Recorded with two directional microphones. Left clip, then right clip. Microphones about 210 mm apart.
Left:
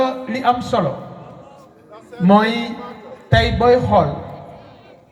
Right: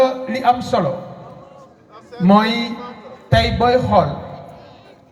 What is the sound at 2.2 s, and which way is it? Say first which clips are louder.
A man's voice: even; 30° right (ahead or behind).